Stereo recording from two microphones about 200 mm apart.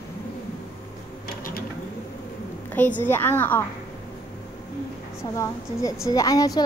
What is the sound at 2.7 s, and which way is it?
Speech, 10° left (ahead or behind).